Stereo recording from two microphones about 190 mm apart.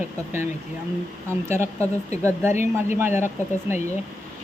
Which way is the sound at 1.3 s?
15° right (ahead or behind).